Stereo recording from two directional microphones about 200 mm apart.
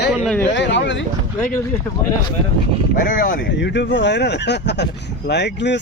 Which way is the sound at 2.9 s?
45° left (ahead or behind).